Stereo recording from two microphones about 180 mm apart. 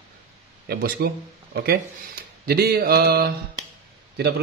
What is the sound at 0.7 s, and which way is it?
A man's voice, 55° right (ahead or behind).